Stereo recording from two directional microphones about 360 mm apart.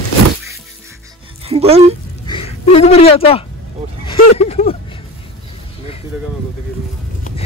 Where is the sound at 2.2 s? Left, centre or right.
Centre.